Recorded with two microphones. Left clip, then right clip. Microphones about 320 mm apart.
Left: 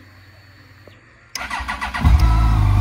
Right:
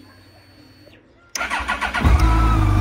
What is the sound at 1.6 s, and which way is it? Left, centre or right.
Vehicle, centre.